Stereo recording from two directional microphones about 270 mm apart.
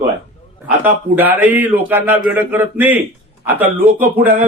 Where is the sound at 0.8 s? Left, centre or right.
Centre.